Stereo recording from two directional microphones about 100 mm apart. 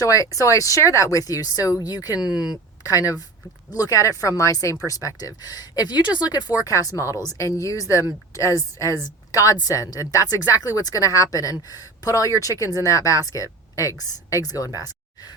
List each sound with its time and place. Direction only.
0.0 s a woman's voice: 35° left (ahead or behind)
2.2 s speech: 5° right (ahead or behind)
2.5 s a woman's voice: 35° left (ahead or behind)